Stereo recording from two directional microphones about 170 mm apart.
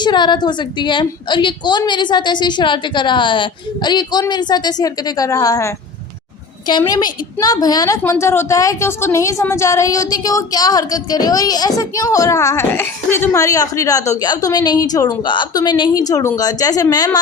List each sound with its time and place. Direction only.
0.0 s a woman's voice: 25° left (ahead or behind)